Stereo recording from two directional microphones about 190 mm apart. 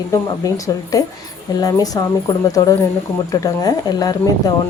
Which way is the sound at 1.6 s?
20° left (ahead or behind).